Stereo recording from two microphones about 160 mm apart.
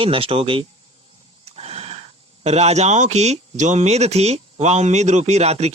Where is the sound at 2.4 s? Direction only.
45° right (ahead or behind).